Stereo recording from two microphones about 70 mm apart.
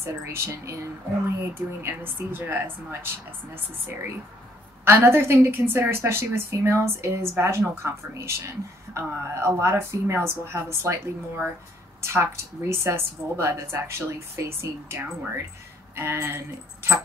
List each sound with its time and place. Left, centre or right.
0.0 s a woman's voice: right
4.8 s a woman's voice: right
12.0 s a woman's voice: right